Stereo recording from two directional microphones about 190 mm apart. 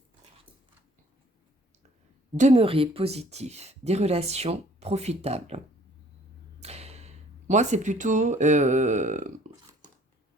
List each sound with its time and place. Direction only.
2.3 s speech: 35° right (ahead or behind)
6.6 s speech: 35° right (ahead or behind)